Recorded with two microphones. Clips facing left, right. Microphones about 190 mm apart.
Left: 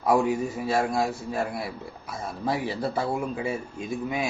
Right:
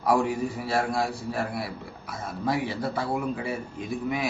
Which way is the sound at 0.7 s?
20° left (ahead or behind).